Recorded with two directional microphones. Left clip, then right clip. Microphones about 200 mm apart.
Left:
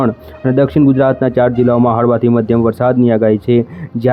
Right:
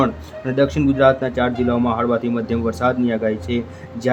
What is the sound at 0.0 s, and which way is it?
Speech, 35° left (ahead or behind).